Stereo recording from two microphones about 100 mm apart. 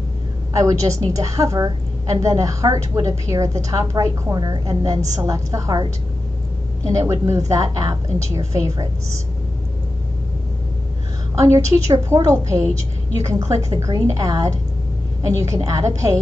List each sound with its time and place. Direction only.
0.5 s a woman's voice: 35° right (ahead or behind)
6.9 s a woman's voice: 35° right (ahead or behind)
11.3 s a woman's voice: 30° right (ahead or behind)